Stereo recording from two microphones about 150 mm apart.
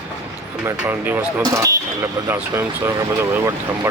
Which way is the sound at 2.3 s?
15° right (ahead or behind).